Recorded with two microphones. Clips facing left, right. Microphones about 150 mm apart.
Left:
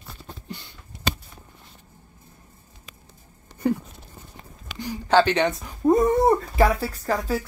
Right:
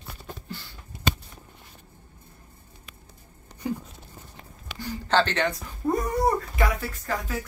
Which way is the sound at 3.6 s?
60° left (ahead or behind).